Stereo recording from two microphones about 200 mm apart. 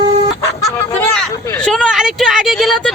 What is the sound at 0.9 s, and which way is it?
Speech, 10° left (ahead or behind).